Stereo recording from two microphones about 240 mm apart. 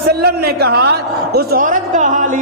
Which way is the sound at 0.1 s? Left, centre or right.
Right.